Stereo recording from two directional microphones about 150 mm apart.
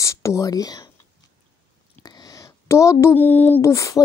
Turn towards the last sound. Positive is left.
turn(degrees=20)  # may be behind; listen again after turning